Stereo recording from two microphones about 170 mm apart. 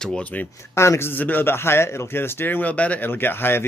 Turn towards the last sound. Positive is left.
turn(degrees=15)  # may be behind; listen again after turning